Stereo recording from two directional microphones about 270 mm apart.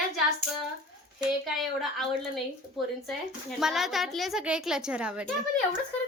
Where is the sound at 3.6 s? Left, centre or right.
Centre.